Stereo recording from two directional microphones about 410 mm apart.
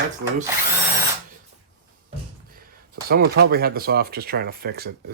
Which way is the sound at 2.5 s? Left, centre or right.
Right.